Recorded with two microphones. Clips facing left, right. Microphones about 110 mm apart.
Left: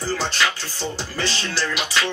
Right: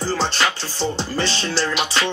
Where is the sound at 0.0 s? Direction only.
30° right (ahead or behind).